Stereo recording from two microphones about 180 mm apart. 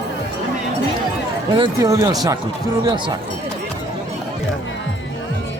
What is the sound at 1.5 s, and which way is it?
Speech, 25° right (ahead or behind).